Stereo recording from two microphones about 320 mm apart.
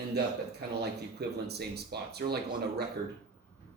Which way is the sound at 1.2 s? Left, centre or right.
Right.